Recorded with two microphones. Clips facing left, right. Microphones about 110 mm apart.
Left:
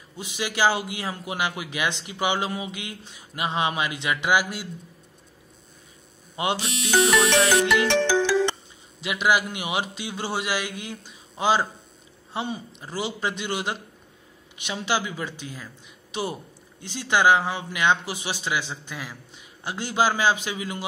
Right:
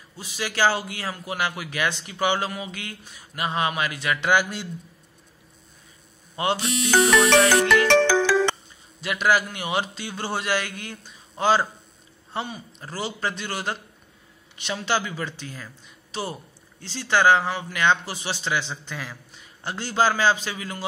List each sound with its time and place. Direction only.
0.2 s speech: 20° left (ahead or behind)
6.3 s speech: 15° left (ahead or behind)
7.2 s music: 90° right
9.0 s speech: 15° left (ahead or behind)